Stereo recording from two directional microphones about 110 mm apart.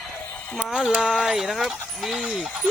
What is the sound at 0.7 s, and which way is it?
Speech, 5° right (ahead or behind).